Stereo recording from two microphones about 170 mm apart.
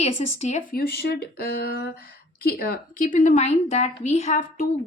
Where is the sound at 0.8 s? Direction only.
65° left (ahead or behind).